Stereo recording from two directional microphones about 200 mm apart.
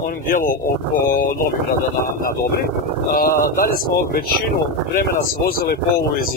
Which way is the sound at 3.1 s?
45° left (ahead or behind).